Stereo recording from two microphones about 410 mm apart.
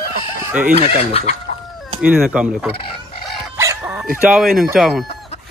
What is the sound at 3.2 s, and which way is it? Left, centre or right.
Chicken, centre.